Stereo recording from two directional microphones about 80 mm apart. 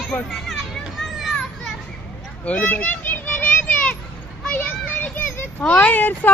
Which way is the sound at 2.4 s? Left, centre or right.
Centre.